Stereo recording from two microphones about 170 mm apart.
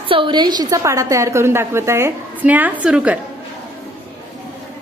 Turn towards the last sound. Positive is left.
turn(degrees=-5)  # may be behind; listen again after turning